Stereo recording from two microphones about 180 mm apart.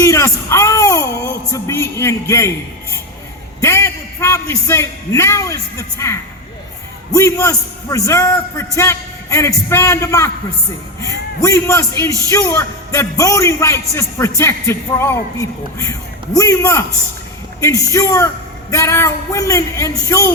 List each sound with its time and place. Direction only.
0.0 s a man's voice: 15° left (ahead or behind)
3.6 s a man's voice: 15° left (ahead or behind)
11.4 s a man's voice: 15° left (ahead or behind)